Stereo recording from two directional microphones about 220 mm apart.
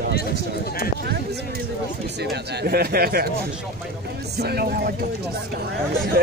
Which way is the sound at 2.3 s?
45° right (ahead or behind).